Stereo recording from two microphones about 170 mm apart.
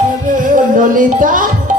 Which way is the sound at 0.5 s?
50° right (ahead or behind).